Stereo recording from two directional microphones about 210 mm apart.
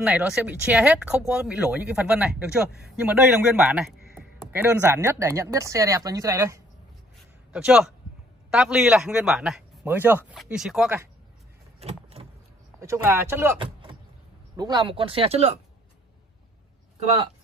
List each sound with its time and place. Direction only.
0.0 s speech: 5° right (ahead or behind)
7.5 s speech: 5° right (ahead or behind)
11.8 s vehicle: 30° right (ahead or behind)
12.8 s speech: 10° right (ahead or behind)
13.6 s vehicle: 25° right (ahead or behind)
14.6 s speech: 20° right (ahead or behind)